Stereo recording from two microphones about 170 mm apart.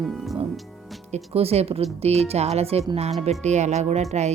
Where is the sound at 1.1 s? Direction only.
35° right (ahead or behind).